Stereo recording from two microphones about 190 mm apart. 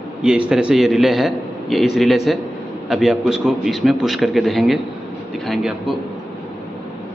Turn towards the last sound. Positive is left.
turn(degrees=0)  # may be behind; listen again after turning